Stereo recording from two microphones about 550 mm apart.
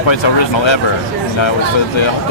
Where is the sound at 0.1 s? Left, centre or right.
Left.